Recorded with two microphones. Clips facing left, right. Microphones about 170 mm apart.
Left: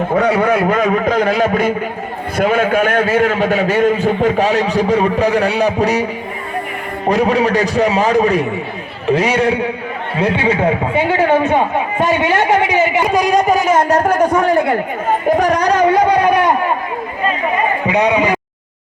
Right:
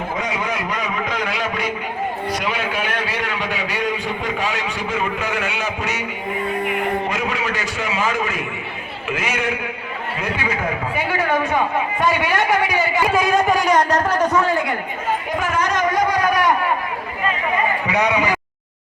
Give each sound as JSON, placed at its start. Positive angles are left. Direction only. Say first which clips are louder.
{"t": 0.1, "sound": "a man's voice", "louder": "left 14 dB", "side_deg": 60}
{"t": 7.1, "sound": "a man's voice", "louder": "left 10 dB", "side_deg": 40}
{"t": 13.1, "sound": "a man's voice", "louder": "left 4 dB", "side_deg": 40}
{"t": 15.3, "sound": "a man's voice", "louder": "left 11 dB", "side_deg": 40}
{"t": 17.8, "sound": "a man's voice", "louder": "left 7 dB", "side_deg": 20}